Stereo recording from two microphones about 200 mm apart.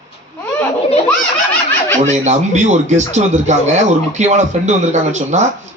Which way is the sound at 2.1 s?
35° right (ahead or behind).